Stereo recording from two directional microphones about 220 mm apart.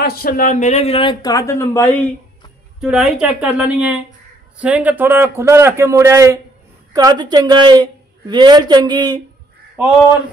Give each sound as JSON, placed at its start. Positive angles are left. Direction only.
{"t": 0.0, "sound": "speech", "side_deg": 40}
{"t": 2.8, "sound": "a man's voice", "side_deg": 0}